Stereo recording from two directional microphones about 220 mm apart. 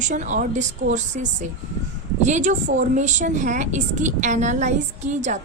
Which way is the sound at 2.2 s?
30° right (ahead or behind).